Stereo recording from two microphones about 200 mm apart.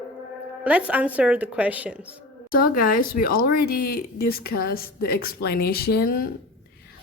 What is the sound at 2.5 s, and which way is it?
Speech, 45° left (ahead or behind).